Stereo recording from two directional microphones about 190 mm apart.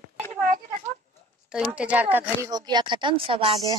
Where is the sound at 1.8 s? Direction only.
5° right (ahead or behind).